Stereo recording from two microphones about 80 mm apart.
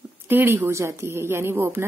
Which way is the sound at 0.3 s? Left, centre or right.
Right.